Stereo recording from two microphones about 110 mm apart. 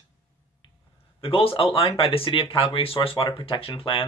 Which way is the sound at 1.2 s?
60° left (ahead or behind).